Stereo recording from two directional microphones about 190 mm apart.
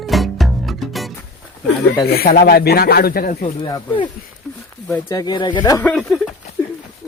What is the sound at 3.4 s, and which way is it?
Speech, 25° left (ahead or behind).